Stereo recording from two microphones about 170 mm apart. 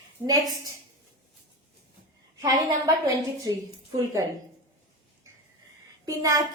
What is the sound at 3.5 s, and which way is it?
Speech, 20° right (ahead or behind).